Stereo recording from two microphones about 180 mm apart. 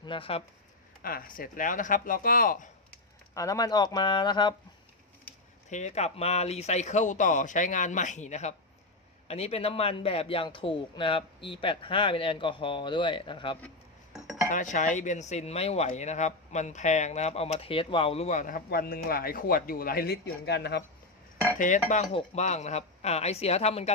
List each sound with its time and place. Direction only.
0.0 s speech: 30° left (ahead or behind)
1.0 s speech: 50° left (ahead or behind)
3.3 s a man's voice: 20° left (ahead or behind)
5.6 s a man's voice: 40° left (ahead or behind)
14.5 s speech: 45° left (ahead or behind); by 20.8 s 70° left (ahead or behind)
21.6 s speech: 45° left (ahead or behind)